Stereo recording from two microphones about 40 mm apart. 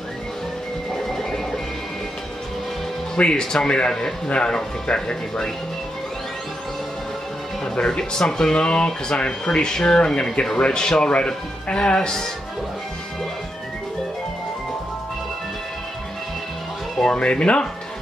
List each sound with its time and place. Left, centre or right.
0.9 s a sound: centre
3.2 s speech: left
7.7 s speech: left
17.1 s speech: left